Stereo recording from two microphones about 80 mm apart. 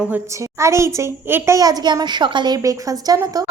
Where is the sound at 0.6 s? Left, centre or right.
Right.